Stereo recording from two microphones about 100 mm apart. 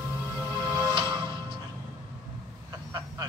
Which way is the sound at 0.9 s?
50° right (ahead or behind).